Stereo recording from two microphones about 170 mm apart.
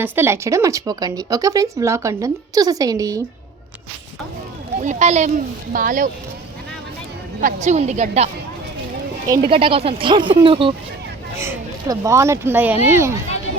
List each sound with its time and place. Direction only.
0.0 s speech: 15° right (ahead or behind)
4.8 s speech: 45° right (ahead or behind)
7.4 s speech: 45° right (ahead or behind)
9.3 s speech: 30° right (ahead or behind)
11.3 s speech: 15° right (ahead or behind)